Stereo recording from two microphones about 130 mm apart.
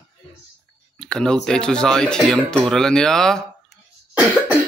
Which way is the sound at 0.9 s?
5° left (ahead or behind).